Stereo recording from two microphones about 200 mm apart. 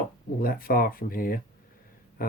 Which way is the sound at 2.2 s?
45° left (ahead or behind).